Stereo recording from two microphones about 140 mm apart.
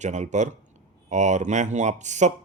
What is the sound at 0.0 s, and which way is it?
Speech, 60° right (ahead or behind).